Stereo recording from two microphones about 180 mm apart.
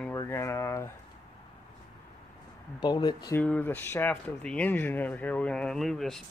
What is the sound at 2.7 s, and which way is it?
Speech, 25° left (ahead or behind).